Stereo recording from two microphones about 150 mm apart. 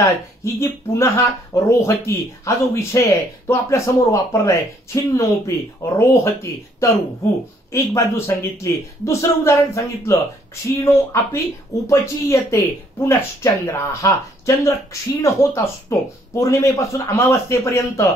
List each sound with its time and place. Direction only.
0.0 s speech: 20° left (ahead or behind)